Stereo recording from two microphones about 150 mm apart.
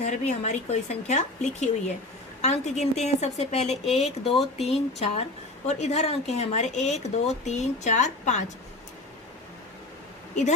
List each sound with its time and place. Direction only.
0.0 s speech: 50° left (ahead or behind)